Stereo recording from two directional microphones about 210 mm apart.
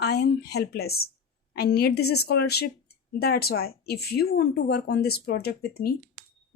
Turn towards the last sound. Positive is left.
turn(degrees=45)  # may be behind; listen again after turning